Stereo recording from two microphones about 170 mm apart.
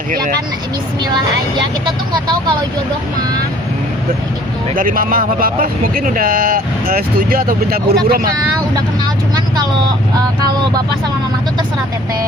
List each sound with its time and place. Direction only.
2.1 s speech: 25° right (ahead or behind)
4.7 s speech: 55° right (ahead or behind)